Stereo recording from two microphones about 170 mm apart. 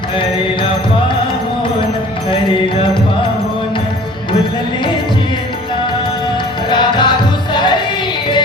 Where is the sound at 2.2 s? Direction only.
30° left (ahead or behind).